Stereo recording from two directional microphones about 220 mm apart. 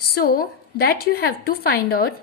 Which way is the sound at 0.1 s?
45° left (ahead or behind).